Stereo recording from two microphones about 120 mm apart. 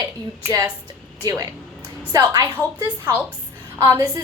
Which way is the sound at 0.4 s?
25° right (ahead or behind).